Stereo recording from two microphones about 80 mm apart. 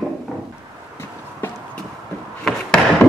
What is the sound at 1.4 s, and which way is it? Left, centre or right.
Clip-clop, left.